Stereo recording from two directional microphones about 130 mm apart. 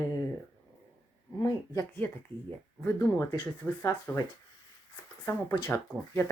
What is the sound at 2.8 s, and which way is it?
Speech, 20° left (ahead or behind).